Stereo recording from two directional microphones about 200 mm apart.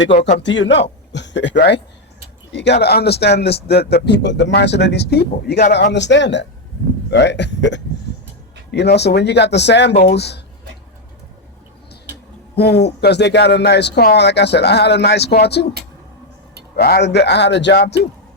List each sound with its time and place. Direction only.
0.2 s speech: 50° left (ahead or behind)
12.5 s speech: 55° left (ahead or behind)
16.7 s speech: 55° left (ahead or behind)